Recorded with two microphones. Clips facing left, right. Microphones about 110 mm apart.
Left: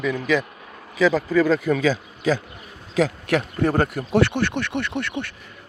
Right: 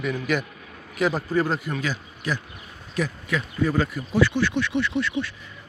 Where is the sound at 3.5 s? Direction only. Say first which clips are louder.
Left 3 dB; 55° left (ahead or behind).